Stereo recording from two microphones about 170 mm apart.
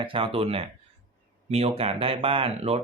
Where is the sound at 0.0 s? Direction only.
30° right (ahead or behind).